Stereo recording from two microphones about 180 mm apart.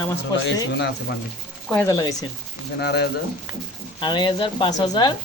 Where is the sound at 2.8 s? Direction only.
65° left (ahead or behind).